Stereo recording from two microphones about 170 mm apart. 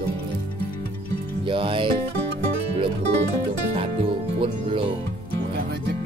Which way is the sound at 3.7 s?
35° right (ahead or behind).